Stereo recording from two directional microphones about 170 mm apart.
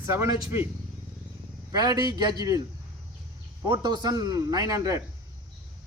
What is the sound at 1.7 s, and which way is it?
Speech, 25° right (ahead or behind).